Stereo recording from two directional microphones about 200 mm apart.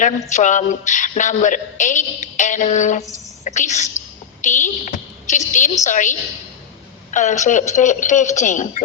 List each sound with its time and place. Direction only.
0.0 s a woman's voice: 40° left (ahead or behind)